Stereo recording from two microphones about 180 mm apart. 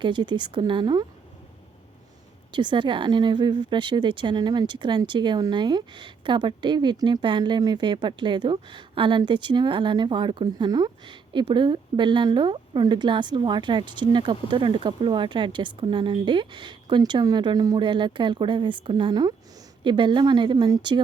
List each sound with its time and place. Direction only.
0.0 s speech: 25° right (ahead or behind)
2.5 s speech: 25° right (ahead or behind)